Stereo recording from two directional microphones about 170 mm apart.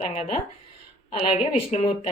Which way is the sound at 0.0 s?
45° left (ahead or behind).